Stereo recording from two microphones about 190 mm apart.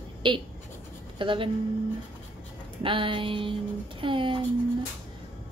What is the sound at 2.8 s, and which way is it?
Speech, 25° right (ahead or behind).